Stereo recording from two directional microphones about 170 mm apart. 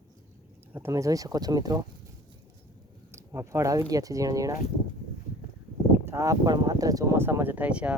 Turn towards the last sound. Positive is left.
turn(degrees=-10)  # may be behind; listen again after turning